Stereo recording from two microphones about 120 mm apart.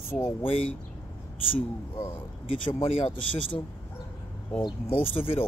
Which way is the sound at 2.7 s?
50° left (ahead or behind).